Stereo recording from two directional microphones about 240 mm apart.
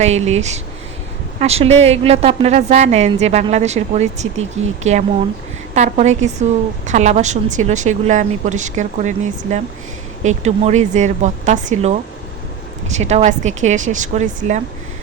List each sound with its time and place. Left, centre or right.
0.0 s a woman's voice: right